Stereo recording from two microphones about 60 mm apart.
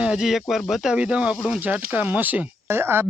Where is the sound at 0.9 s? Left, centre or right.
Right.